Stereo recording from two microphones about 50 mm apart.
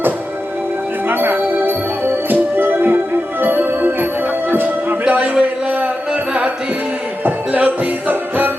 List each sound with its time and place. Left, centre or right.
1.0 s music: right
5.0 s a sound: right
7.6 s music: right